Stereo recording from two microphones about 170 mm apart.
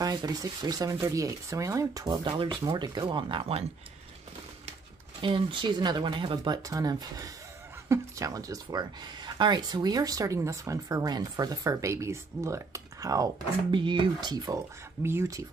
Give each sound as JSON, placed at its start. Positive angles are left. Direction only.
{"t": 0.0, "sound": "speech", "side_deg": -20}
{"t": 5.2, "sound": "speech", "side_deg": -30}